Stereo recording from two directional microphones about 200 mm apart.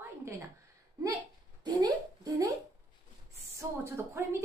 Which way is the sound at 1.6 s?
20° right (ahead or behind).